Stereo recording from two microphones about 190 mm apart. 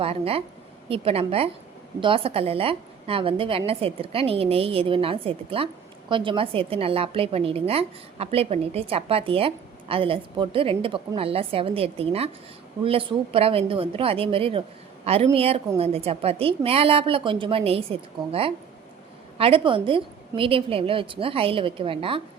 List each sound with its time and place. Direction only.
0.0 s a woman's voice: 30° right (ahead or behind)